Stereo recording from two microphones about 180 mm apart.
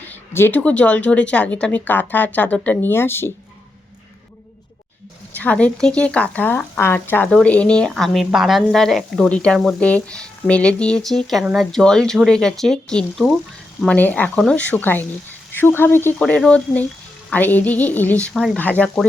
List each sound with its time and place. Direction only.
0.3 s speech: 10° left (ahead or behind)
5.3 s a woman's voice: 10° left (ahead or behind)